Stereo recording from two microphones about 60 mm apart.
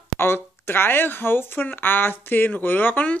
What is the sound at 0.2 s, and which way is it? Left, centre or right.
Speech, left.